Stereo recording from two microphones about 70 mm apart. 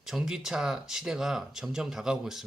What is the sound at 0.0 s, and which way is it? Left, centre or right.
Speech, centre.